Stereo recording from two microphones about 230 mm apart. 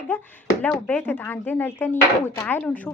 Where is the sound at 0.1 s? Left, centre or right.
Centre.